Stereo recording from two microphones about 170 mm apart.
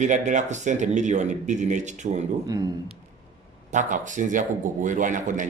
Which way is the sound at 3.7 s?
45° right (ahead or behind).